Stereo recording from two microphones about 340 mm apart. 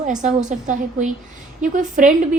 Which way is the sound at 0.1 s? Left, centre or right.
Right.